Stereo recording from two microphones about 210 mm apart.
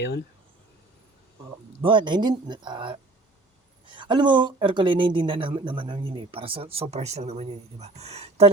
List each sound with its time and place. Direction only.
1.8 s speech: 25° right (ahead or behind)